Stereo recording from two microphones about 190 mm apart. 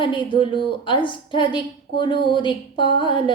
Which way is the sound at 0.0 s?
25° left (ahead or behind).